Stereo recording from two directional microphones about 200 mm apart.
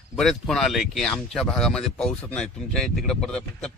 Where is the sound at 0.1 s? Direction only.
Centre (ahead or behind).